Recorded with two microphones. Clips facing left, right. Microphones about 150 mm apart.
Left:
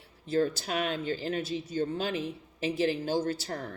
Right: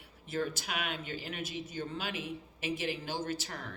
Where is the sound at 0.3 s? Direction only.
35° left (ahead or behind).